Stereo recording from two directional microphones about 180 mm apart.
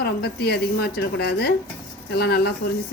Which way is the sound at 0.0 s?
65° left (ahead or behind).